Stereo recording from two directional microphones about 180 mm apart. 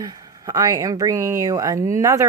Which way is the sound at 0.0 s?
20° right (ahead or behind).